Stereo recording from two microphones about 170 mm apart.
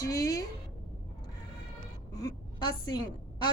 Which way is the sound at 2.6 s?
25° left (ahead or behind).